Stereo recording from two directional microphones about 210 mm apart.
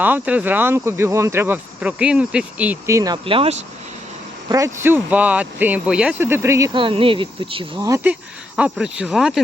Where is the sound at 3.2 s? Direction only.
25° right (ahead or behind).